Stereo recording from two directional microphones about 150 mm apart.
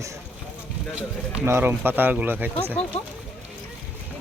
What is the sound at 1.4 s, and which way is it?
Speech, 15° right (ahead or behind).